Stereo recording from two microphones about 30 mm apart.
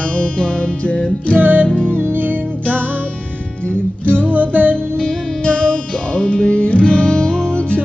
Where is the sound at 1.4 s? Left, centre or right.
Right.